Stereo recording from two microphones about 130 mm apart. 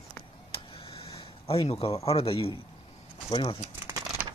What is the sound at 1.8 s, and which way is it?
Speech, 50° left (ahead or behind).